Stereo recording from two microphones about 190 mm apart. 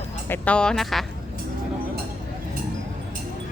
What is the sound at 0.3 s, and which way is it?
Speech, 5° left (ahead or behind).